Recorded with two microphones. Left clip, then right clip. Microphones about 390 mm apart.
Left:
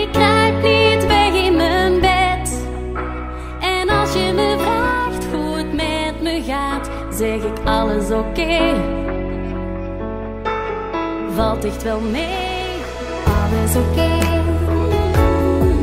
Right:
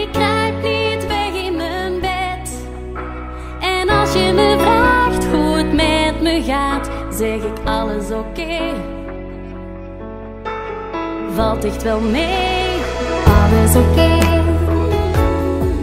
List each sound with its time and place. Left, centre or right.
0.0 s music: left
3.6 s music: centre; by 6.8 s right
7.2 s music: centre
7.6 s music: centre; by 8.8 s left
11.2 s music: centre
11.9 s music: right; by 15.8 s left